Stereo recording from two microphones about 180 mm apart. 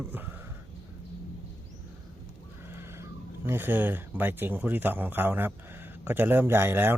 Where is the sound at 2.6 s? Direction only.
15° right (ahead or behind).